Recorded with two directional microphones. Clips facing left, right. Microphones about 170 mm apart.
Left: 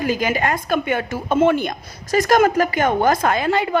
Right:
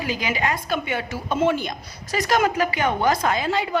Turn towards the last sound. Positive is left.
turn(degrees=55)  # may be behind; listen again after turning